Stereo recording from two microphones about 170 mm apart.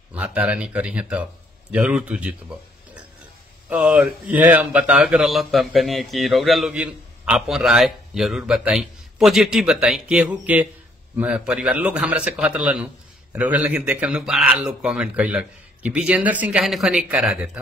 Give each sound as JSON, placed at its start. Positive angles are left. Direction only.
{"t": 0.1, "sound": "a man's voice", "side_deg": -5}
{"t": 3.6, "sound": "a man's voice", "side_deg": -5}